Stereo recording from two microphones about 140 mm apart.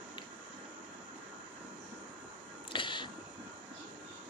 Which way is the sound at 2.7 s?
35° left (ahead or behind).